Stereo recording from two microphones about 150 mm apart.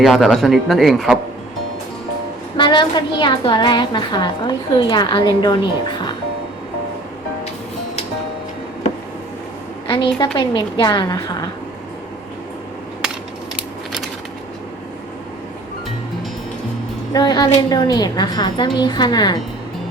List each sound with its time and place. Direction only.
0.0 s a man's voice: centre (ahead or behind)
2.6 s a woman's voice: 30° left (ahead or behind)
9.8 s a woman's voice: 30° left (ahead or behind)
17.1 s a woman's voice: 25° left (ahead or behind)